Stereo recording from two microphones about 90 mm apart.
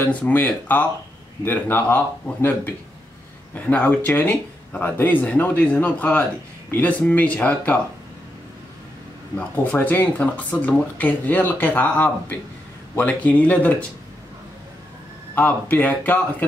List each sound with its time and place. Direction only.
0.0 s speech: 20° left (ahead or behind)
9.4 s speech: 20° left (ahead or behind)
15.3 s speech: 20° left (ahead or behind)